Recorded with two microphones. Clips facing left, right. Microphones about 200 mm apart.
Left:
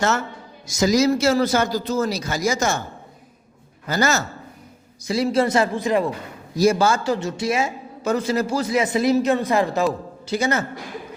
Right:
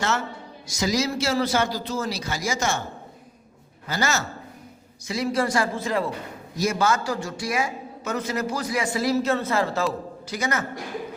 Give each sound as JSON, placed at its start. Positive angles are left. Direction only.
{"t": 0.8, "sound": "a man's voice", "side_deg": 45}
{"t": 3.8, "sound": "a man's voice", "side_deg": 45}
{"t": 5.0, "sound": "a man's voice", "side_deg": 30}
{"t": 6.6, "sound": "a man's voice", "side_deg": 30}